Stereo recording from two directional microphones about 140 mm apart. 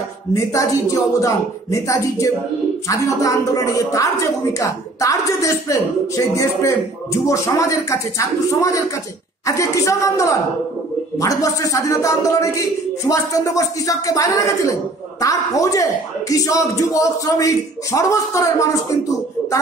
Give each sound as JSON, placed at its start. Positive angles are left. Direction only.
{"t": 0.3, "sound": "speech", "side_deg": 25}